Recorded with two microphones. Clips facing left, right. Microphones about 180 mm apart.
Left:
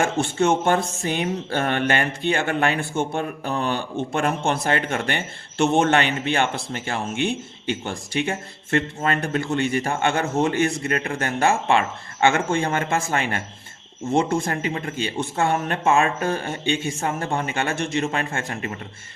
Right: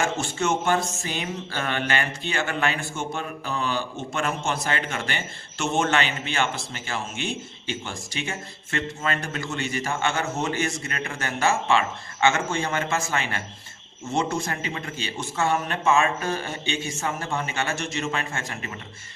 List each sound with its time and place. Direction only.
0.0 s a man's voice: 55° left (ahead or behind)
15.5 s a man's voice: 40° left (ahead or behind)